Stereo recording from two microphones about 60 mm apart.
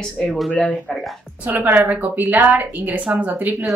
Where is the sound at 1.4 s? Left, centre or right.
Right.